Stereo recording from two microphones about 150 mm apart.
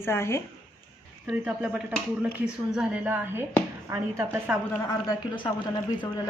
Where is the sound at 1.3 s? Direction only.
10° right (ahead or behind).